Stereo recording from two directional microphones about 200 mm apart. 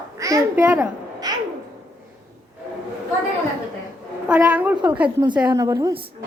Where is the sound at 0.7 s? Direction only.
15° right (ahead or behind).